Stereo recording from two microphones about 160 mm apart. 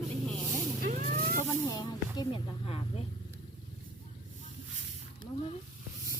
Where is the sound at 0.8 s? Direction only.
45° right (ahead or behind).